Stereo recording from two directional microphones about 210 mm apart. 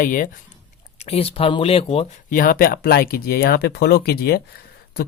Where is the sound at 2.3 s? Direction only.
40° left (ahead or behind).